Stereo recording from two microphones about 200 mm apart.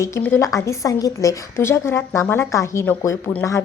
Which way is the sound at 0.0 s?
10° left (ahead or behind).